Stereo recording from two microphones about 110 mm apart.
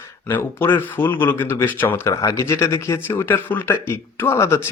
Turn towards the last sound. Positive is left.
turn(degrees=25)  # may be behind; listen again after turning